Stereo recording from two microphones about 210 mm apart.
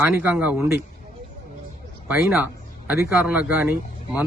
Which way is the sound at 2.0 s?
5° right (ahead or behind).